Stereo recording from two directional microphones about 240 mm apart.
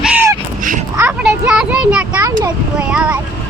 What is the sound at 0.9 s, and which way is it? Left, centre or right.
Children playing, centre.